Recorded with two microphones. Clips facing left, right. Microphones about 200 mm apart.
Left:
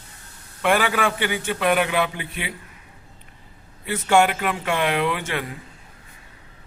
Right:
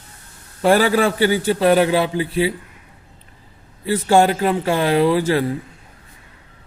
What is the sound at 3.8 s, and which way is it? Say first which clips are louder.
A man's voice: right 4 dB; 35° right (ahead or behind).